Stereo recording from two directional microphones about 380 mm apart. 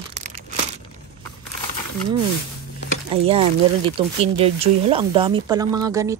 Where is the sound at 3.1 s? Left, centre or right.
Centre.